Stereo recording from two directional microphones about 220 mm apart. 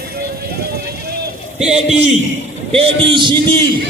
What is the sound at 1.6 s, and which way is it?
A man's voice, 30° right (ahead or behind).